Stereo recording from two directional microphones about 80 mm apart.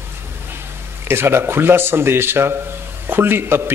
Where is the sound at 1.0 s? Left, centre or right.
Right.